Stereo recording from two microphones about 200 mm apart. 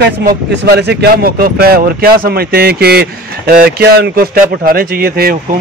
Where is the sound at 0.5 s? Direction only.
55° right (ahead or behind).